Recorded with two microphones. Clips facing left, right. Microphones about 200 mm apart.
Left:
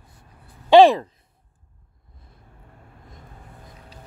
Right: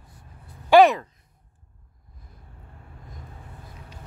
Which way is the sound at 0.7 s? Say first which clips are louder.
Left 3 dB; 30° left (ahead or behind).